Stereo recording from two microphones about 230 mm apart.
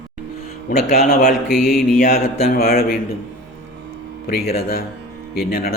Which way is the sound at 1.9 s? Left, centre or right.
Left.